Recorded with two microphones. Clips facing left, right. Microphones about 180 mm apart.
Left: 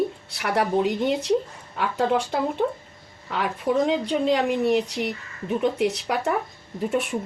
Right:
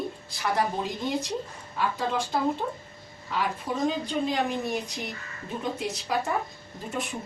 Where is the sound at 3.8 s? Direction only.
75° left (ahead or behind).